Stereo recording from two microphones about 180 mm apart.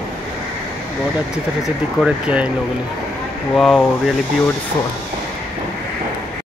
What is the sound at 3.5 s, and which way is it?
Speech, centre (ahead or behind).